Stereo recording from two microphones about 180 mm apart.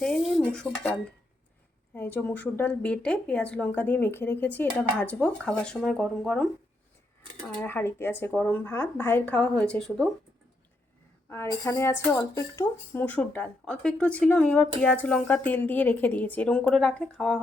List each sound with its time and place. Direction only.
0.0 s dishes: centre (ahead or behind)
2.0 s speech: 10° left (ahead or behind)
11.3 s speech: 15° left (ahead or behind)